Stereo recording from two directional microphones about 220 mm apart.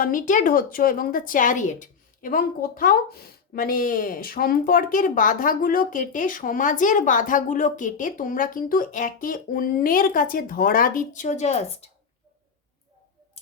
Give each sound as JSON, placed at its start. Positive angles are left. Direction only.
{"t": 0.0, "sound": "a woman's voice", "side_deg": 35}